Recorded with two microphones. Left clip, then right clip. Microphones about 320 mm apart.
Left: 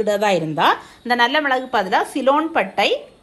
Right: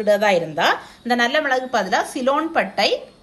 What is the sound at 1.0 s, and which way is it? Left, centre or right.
A woman's voice, centre.